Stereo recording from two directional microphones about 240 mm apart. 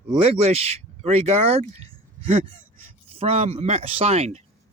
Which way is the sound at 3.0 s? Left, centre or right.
Right.